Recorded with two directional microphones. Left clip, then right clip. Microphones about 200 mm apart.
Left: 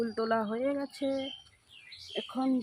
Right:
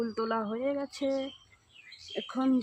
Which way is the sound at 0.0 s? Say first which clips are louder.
Left 1 dB; 15° right (ahead or behind).